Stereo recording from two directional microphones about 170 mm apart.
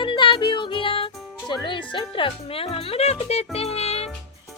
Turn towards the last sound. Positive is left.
turn(degrees=35)  # may be behind; listen again after turning